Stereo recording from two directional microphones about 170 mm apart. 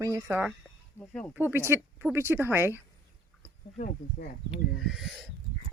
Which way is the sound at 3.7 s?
50° left (ahead or behind).